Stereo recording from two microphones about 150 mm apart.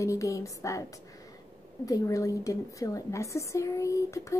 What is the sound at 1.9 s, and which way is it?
A woman's voice, 25° left (ahead or behind).